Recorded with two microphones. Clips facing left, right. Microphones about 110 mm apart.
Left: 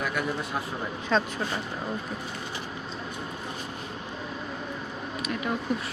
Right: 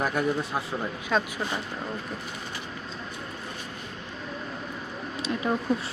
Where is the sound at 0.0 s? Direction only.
40° right (ahead or behind).